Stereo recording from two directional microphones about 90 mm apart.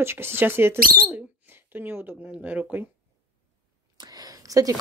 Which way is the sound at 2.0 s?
15° right (ahead or behind).